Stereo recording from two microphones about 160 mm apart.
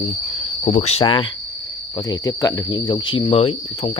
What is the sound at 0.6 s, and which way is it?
Cricket, 45° left (ahead or behind).